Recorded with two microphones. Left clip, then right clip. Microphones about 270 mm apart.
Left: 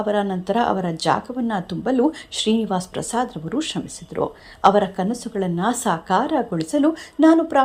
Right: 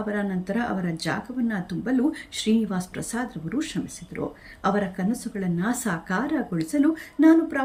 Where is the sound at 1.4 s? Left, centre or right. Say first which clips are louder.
Left 6 dB; centre.